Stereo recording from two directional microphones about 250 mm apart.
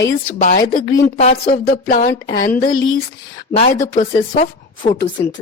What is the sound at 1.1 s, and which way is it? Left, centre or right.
A woman's voice, left.